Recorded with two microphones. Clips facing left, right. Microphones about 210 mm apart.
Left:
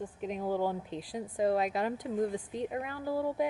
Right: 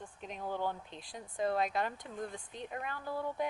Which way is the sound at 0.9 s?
5° left (ahead or behind).